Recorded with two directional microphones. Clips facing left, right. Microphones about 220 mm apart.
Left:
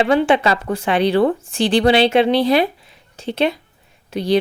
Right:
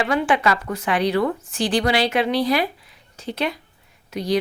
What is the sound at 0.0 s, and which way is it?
A woman's voice, 25° left (ahead or behind).